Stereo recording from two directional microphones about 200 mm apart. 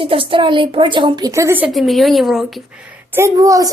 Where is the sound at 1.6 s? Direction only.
Centre (ahead or behind).